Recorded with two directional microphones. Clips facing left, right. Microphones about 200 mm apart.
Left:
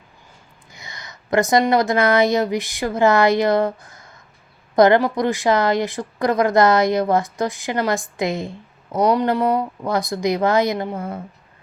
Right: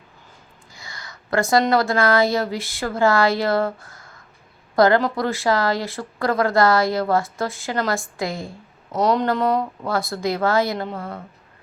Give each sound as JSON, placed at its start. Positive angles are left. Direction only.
{"t": 0.7, "sound": "a woman's voice", "side_deg": 20}